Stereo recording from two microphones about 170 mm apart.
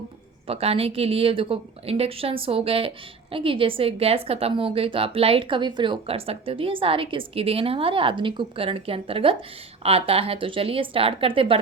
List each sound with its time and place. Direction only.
0.4 s a woman's voice: 35° right (ahead or behind)